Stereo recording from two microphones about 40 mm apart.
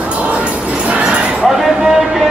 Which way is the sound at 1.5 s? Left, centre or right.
Centre.